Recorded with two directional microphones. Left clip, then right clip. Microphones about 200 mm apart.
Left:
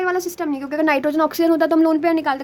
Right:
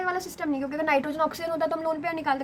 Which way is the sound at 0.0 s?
50° left (ahead or behind).